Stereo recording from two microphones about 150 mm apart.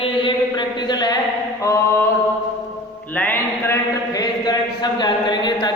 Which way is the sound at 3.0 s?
10° left (ahead or behind).